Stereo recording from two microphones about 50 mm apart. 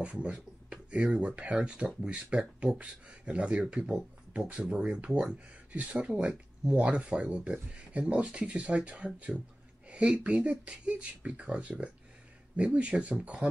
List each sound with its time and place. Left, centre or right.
0.0 s speech: right